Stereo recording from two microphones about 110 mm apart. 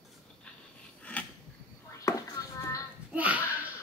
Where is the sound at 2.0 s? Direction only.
30° left (ahead or behind).